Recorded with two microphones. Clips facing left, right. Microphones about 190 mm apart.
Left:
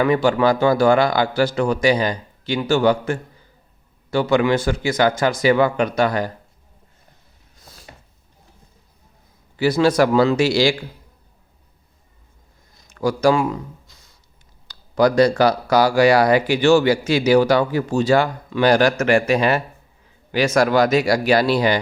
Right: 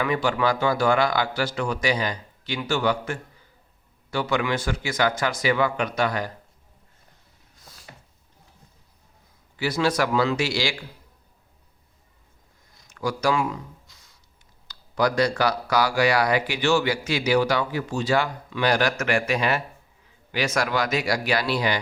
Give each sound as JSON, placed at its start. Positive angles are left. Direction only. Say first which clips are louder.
{"t": 0.0, "sound": "speech", "louder": "left 7 dB", "side_deg": 35}
{"t": 9.6, "sound": "speech", "louder": "left 7 dB", "side_deg": 30}
{"t": 12.9, "sound": "speech", "louder": "left 7 dB", "side_deg": 35}